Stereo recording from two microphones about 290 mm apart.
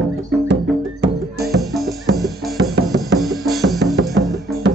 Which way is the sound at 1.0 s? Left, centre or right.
Right.